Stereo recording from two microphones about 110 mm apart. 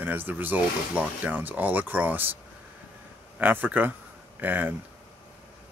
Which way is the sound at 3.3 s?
15° right (ahead or behind).